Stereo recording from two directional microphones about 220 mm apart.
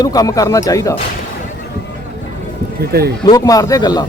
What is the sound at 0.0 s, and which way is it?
Speech, 15° left (ahead or behind).